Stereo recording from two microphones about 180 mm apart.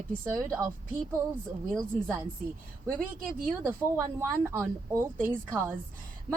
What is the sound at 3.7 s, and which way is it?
Speech, 15° right (ahead or behind).